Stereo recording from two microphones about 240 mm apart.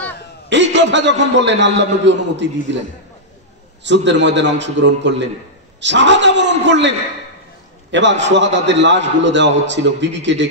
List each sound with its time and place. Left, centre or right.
0.5 s a man's voice: right
3.8 s a man's voice: right
7.9 s a man's voice: right